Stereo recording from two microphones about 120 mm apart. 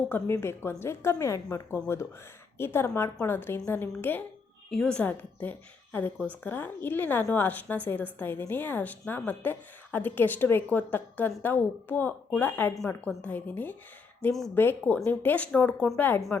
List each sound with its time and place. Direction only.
0.1 s a woman's voice: 20° left (ahead or behind)
4.7 s a woman's voice: 5° left (ahead or behind)